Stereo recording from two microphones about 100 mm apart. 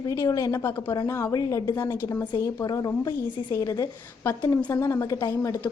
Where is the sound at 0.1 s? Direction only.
35° left (ahead or behind).